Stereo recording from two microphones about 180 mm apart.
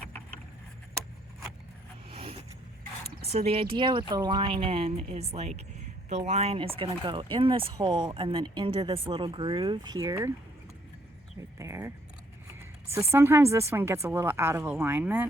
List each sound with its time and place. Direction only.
2.0 s vehicle: 35° right (ahead or behind)
3.3 s a woman's voice: 35° right (ahead or behind); by 10.3 s 15° right (ahead or behind)
11.6 s speech: 15° right (ahead or behind)
12.9 s speech: 15° right (ahead or behind)